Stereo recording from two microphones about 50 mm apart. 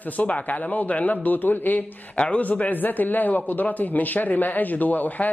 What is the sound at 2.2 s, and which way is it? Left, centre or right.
Speech, left.